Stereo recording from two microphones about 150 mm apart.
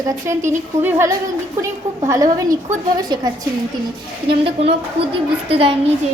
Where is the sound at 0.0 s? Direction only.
20° right (ahead or behind).